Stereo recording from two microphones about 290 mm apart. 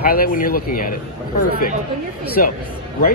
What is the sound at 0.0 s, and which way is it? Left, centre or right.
Speech, left.